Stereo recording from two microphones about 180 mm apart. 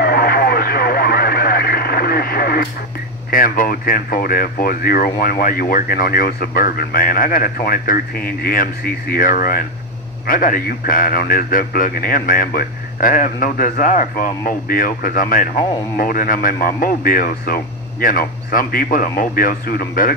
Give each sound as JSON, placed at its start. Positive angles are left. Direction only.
{"t": 0.0, "sound": "radio", "side_deg": 55}
{"t": 3.3, "sound": "a man's voice", "side_deg": 50}